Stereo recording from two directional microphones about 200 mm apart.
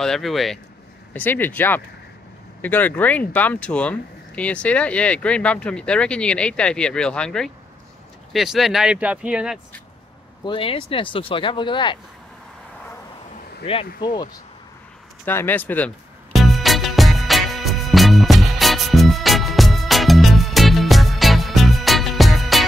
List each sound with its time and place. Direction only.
0.0 s speech: centre (ahead or behind)
10.4 s speech: 25° left (ahead or behind)
13.7 s speech: 25° left (ahead or behind)
15.2 s speech: 10° left (ahead or behind)
16.3 s music: centre (ahead or behind)